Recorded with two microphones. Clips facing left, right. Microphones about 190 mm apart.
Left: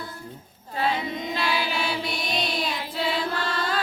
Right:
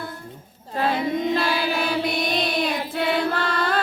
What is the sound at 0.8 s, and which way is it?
Music, 50° right (ahead or behind).